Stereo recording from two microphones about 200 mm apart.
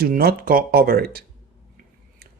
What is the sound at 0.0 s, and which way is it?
Speech, 50° right (ahead or behind).